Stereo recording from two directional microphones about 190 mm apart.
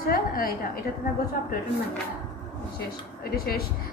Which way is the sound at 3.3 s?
55° left (ahead or behind).